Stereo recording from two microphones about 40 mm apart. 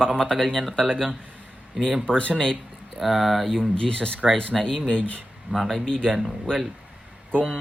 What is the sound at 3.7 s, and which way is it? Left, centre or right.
Speech, centre.